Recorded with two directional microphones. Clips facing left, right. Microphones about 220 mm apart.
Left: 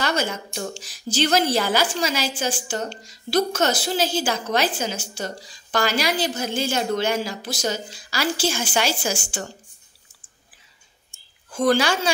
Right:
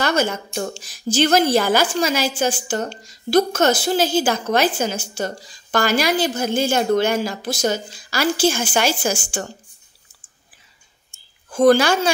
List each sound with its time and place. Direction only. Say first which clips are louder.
0.0 s a woman's voice: right 4 dB; 50° right (ahead or behind)
11.5 s a woman's voice: right 6 dB; 50° right (ahead or behind)